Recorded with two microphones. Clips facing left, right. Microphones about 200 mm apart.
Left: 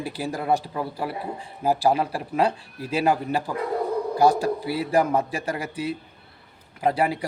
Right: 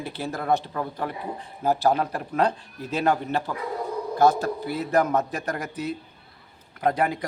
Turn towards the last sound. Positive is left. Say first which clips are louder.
# left 1 dB
turn(degrees=5)  # may be behind; listen again after turning